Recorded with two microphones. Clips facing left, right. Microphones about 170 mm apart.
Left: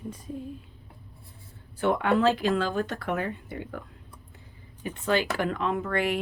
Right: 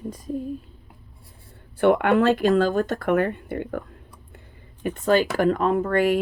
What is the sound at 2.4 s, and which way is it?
Speech, 40° right (ahead or behind).